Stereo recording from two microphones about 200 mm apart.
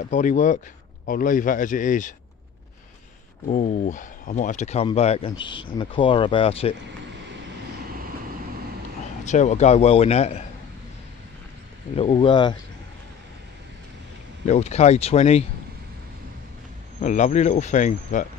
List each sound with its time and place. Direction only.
0.1 s speech: 40° left (ahead or behind)
3.4 s speech: 40° left (ahead or behind)
9.2 s speech: 35° left (ahead or behind)
12.0 s speech: 25° left (ahead or behind)
14.4 s speech: 35° left (ahead or behind)
17.0 s speech: 35° left (ahead or behind)